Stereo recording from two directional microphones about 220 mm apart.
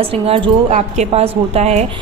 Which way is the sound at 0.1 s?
25° right (ahead or behind).